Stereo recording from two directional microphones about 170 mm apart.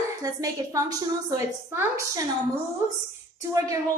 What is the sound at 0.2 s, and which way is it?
A woman's voice, 20° right (ahead or behind).